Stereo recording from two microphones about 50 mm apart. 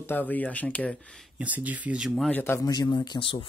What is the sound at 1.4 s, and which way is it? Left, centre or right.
Speech, right.